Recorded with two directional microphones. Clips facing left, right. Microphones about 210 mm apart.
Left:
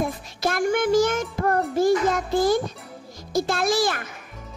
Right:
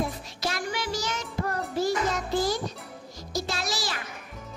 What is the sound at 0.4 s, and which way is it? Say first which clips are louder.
Child singing: left 10 dB; 50° left (ahead or behind).